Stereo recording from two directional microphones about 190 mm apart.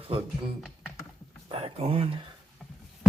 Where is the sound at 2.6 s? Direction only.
Centre (ahead or behind).